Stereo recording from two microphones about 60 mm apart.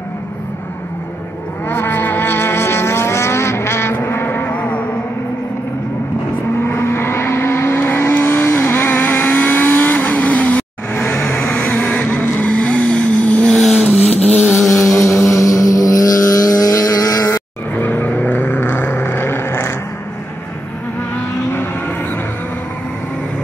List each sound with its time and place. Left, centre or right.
1.7 s vehicle: left
4.5 s music: left
6.6 s vehicle: left
13.5 s vehicle: centre
14.7 s vehicle: left
17.7 s vehicle: left